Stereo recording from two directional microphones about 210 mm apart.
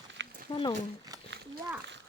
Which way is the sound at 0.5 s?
20° left (ahead or behind).